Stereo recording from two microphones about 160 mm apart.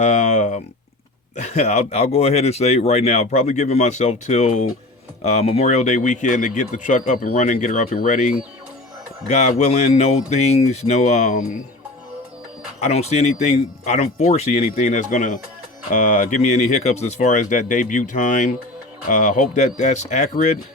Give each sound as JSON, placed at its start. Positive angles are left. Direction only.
{"t": 0.0, "sound": "speech", "side_deg": 50}
{"t": 12.8, "sound": "speech", "side_deg": 40}